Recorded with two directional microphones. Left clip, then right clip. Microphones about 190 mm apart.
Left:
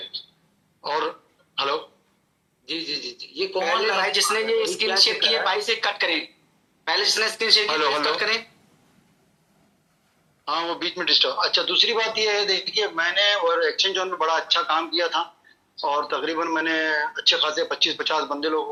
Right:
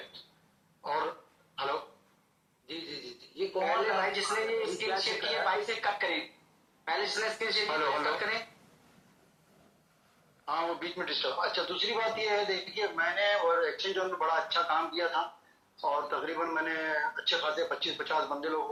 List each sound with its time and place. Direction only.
0.8 s a sound: 40° left (ahead or behind)
3.3 s a man's voice: 40° left (ahead or behind)
10.4 s a man's voice: 40° left (ahead or behind)